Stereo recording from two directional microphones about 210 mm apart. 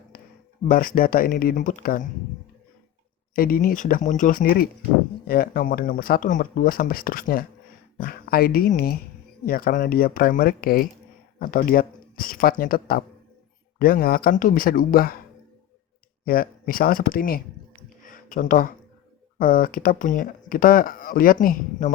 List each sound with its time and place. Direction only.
0.1 s a sound: 45° left (ahead or behind)
0.7 s speech: 40° left (ahead or behind)
3.3 s speech: 40° left (ahead or behind)
16.2 s speech: 45° left (ahead or behind)
18.0 s a sound: 40° left (ahead or behind)
19.4 s speech: 40° left (ahead or behind)